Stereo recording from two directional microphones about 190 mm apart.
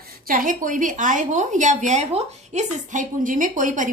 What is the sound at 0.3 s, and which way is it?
A woman's voice, 45° right (ahead or behind).